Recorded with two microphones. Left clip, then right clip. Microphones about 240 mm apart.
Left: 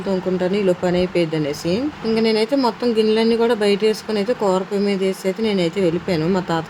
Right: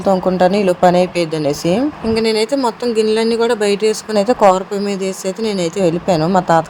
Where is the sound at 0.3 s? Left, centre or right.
Right.